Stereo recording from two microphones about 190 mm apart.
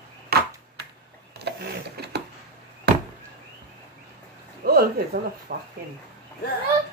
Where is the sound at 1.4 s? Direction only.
60° right (ahead or behind).